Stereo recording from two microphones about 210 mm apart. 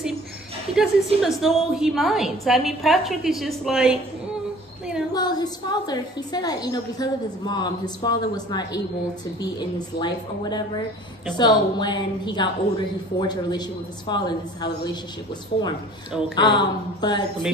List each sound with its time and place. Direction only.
0.8 s a woman's voice: 5° right (ahead or behind)
5.1 s a woman's voice: 20° left (ahead or behind)